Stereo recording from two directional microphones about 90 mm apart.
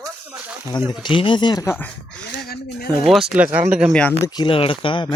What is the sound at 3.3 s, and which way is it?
Speech, 15° right (ahead or behind).